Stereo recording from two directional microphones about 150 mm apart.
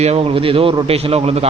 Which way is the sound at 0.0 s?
40° right (ahead or behind).